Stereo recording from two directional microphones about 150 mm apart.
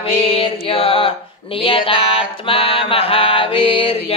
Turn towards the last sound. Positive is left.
turn(degrees=35)  # may be behind; listen again after turning